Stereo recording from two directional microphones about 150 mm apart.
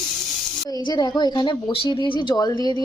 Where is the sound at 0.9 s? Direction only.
25° left (ahead or behind).